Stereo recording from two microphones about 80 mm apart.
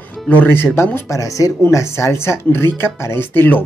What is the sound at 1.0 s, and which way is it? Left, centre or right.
Speech, left.